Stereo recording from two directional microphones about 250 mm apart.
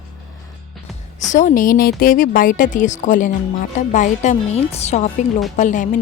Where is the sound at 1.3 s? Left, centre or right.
Left.